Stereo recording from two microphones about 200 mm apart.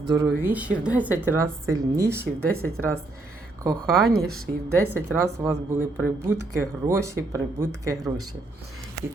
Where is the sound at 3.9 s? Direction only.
Centre (ahead or behind).